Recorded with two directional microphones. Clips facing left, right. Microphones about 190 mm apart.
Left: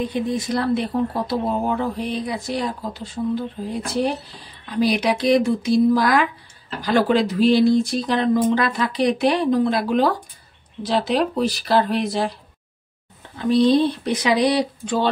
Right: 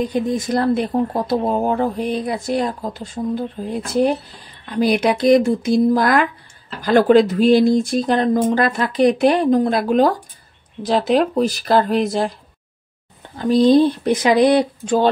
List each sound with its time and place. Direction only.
0.1 s speech: 45° right (ahead or behind)
13.4 s speech: 45° right (ahead or behind)